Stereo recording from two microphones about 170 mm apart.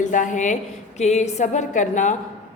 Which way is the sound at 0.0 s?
50° left (ahead or behind).